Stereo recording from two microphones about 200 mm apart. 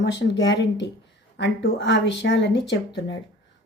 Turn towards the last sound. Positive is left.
turn(degrees=60)  # may be behind; listen again after turning